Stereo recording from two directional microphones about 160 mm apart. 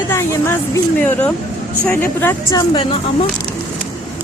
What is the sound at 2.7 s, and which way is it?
Speech, 35° left (ahead or behind).